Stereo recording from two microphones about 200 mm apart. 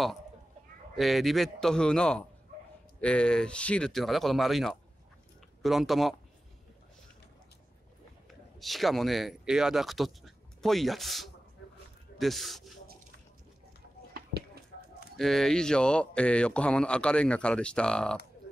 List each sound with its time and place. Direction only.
0.9 s speech: centre (ahead or behind)
8.3 s speech: centre (ahead or behind)
14.1 s a sound: 50° right (ahead or behind)
15.1 s speech: centre (ahead or behind)